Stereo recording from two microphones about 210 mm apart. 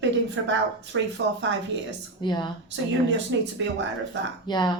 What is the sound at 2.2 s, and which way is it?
Speech, 20° left (ahead or behind).